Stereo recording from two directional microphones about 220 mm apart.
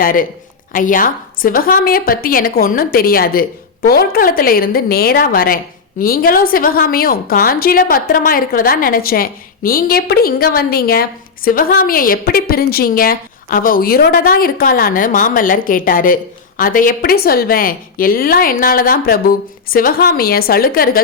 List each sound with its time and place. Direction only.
0.0 s a woman's voice: 40° left (ahead or behind)